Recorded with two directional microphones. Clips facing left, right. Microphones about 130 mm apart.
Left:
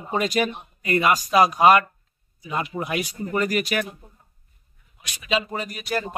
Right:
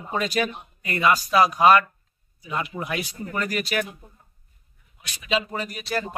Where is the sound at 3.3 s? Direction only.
15° left (ahead or behind).